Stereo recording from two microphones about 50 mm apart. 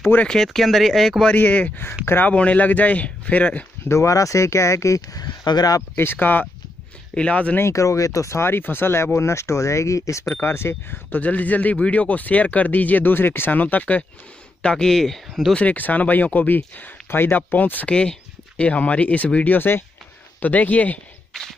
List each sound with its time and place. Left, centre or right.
0.3 s speech: centre
1.2 s speech: left
3.9 s speech: left
5.8 s speech: left
7.2 s speech: left
7.6 s speech: left
8.5 s speech: left
10.3 s speech: left
11.1 s speech: left
14.6 s speech: centre
15.5 s speech: left
17.8 s speech: left
21.3 s walk: centre